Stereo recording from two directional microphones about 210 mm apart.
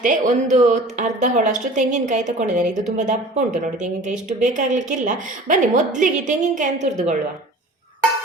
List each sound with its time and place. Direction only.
0.0 s a woman's voice: 35° right (ahead or behind)
4.1 s a woman's voice: 5° right (ahead or behind)
4.4 s a woman's voice: 35° right (ahead or behind)